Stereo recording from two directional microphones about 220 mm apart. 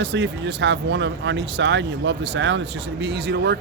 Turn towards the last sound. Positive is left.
turn(degrees=-50)  # may be behind; listen again after turning